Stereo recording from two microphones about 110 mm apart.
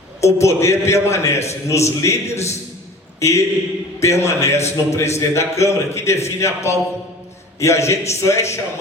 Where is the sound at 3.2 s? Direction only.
25° left (ahead or behind).